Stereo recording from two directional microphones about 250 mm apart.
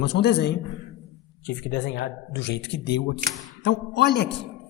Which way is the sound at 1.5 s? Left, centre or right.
Left.